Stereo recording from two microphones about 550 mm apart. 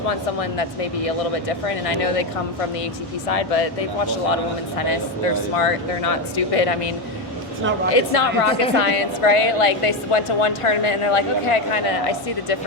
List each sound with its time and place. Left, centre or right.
0.1 s speech: left
3.2 s speech: left
4.8 s speech: left
7.9 s a woman's voice: left